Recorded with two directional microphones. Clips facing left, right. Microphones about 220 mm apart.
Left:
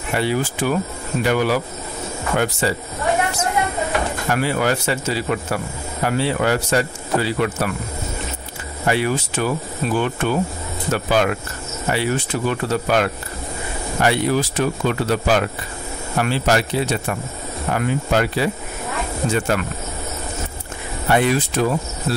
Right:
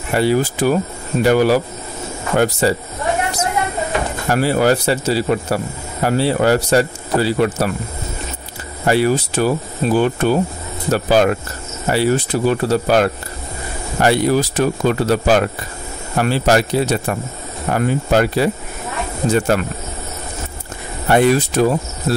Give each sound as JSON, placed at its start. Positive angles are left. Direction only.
{"t": 0.1, "sound": "speech", "side_deg": -40}
{"t": 4.3, "sound": "speech", "side_deg": -40}
{"t": 8.8, "sound": "speech", "side_deg": -40}
{"t": 21.1, "sound": "speech", "side_deg": -40}
{"t": 22.1, "sound": "cricket", "side_deg": -40}